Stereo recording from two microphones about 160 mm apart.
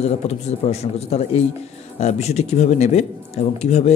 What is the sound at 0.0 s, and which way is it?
Speech, 40° left (ahead or behind).